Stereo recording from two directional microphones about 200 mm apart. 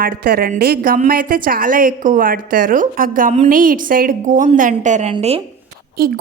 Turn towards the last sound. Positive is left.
turn(degrees=-50)  # may be behind; listen again after turning